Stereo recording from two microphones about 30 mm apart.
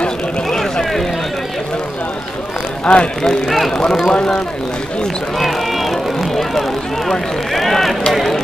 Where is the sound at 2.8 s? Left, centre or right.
Left.